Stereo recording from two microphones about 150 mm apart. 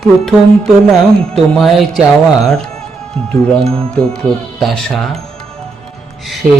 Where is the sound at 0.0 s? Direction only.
5° left (ahead or behind).